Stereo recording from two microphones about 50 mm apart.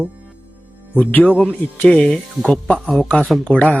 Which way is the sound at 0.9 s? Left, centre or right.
Left.